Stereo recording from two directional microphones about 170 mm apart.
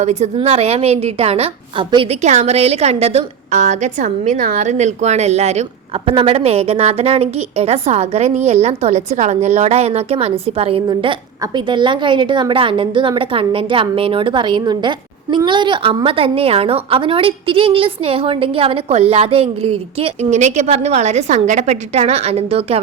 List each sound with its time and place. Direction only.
0.0 s a woman's voice: 40° right (ahead or behind)
2.2 s a woman's voice: 40° right (ahead or behind)